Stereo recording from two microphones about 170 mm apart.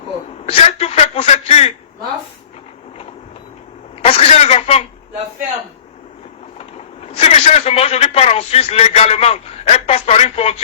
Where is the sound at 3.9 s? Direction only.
35° left (ahead or behind).